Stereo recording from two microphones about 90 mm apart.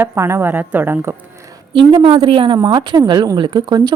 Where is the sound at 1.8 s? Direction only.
75° right (ahead or behind).